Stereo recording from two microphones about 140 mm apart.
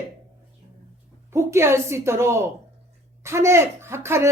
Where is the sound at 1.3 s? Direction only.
20° right (ahead or behind).